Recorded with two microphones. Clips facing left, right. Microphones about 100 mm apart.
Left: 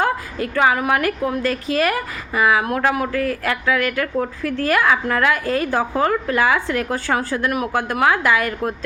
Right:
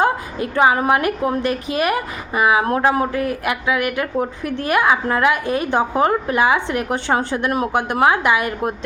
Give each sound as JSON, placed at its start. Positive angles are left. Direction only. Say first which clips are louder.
{"t": 0.0, "sound": "a woman's voice", "louder": "right 2 dB", "side_deg": -25}